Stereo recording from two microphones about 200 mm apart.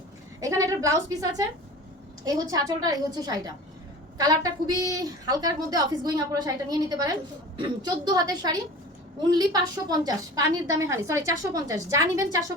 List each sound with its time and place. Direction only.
0.3 s a woman's voice: 15° right (ahead or behind)
4.7 s a woman's voice: 20° right (ahead or behind)